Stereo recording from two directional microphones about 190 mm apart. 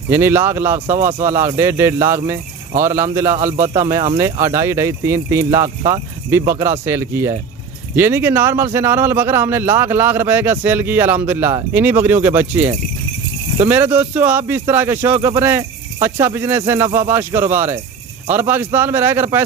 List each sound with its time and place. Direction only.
0.1 s a man's voice: 10° right (ahead or behind)
3.3 s speech: 40° right (ahead or behind)
3.9 s a man's voice: 15° right (ahead or behind)